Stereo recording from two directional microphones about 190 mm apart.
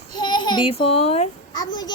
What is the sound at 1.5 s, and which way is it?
Speech, 20° left (ahead or behind).